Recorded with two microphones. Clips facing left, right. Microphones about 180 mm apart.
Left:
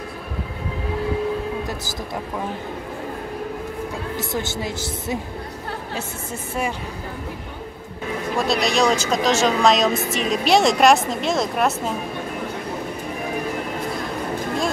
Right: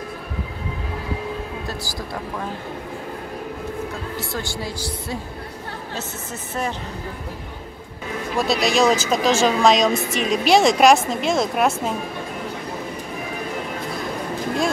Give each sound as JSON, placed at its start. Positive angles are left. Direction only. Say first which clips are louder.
{"t": 4.2, "sound": "speech", "louder": "left 3 dB", "side_deg": 20}
{"t": 8.4, "sound": "a woman's voice", "louder": "right 1 dB", "side_deg": 0}